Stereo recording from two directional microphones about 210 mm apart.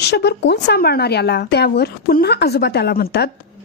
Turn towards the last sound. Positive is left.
turn(degrees=50)  # may be behind; listen again after turning